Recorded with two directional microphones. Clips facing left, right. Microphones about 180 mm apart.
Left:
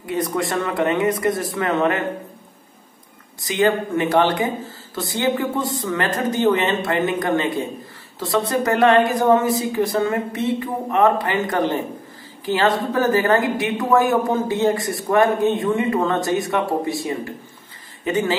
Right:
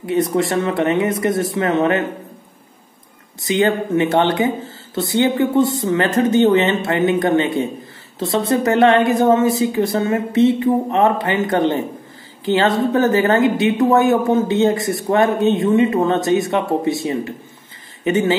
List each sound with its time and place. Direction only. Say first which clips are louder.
0.0 s a woman's voice: right 5 dB; 25° right (ahead or behind)
3.3 s a woman's voice: right 2 dB; 25° right (ahead or behind)